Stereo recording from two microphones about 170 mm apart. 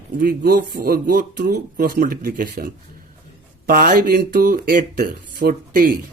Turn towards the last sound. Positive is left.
turn(degrees=-55)  # may be behind; listen again after turning